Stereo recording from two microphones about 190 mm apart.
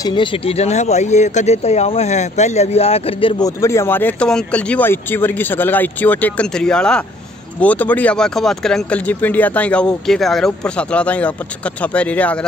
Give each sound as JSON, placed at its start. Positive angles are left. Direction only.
{"t": 0.0, "sound": "speech", "side_deg": 25}